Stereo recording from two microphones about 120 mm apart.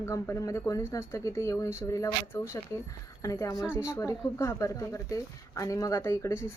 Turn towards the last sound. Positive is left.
turn(degrees=20)  # may be behind; listen again after turning